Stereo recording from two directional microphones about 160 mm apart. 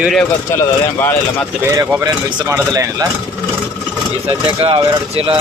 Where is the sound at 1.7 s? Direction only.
15° right (ahead or behind).